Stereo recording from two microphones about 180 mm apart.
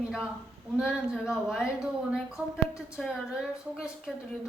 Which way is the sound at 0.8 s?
5° right (ahead or behind).